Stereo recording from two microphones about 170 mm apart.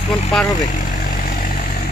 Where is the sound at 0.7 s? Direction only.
50° left (ahead or behind).